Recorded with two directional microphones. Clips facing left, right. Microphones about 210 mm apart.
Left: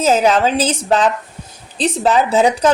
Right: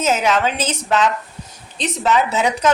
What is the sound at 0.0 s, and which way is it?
A woman's voice, 35° left (ahead or behind).